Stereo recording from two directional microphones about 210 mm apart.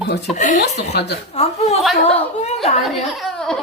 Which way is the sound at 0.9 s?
50° left (ahead or behind).